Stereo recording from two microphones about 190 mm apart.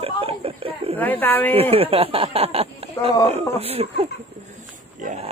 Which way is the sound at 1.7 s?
30° right (ahead or behind).